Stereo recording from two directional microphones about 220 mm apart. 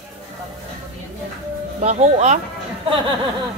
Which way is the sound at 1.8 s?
30° right (ahead or behind).